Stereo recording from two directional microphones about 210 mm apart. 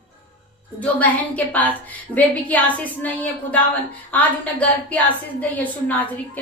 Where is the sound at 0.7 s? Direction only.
5° left (ahead or behind).